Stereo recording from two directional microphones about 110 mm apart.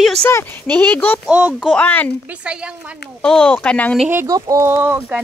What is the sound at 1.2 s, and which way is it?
Speech, 15° right (ahead or behind).